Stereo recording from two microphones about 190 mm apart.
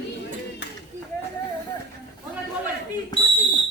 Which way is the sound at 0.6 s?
65° left (ahead or behind).